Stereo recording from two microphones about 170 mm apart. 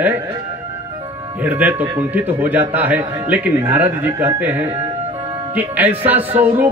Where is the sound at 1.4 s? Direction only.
10° right (ahead or behind).